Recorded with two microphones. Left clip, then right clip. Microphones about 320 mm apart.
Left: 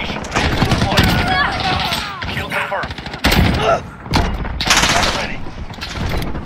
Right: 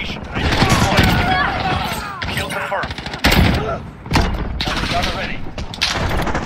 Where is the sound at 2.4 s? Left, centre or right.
Centre.